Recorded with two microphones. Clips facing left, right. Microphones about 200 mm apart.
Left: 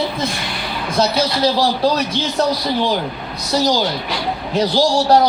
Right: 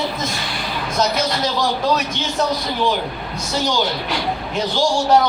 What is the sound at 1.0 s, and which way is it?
A man's voice, 35° left (ahead or behind).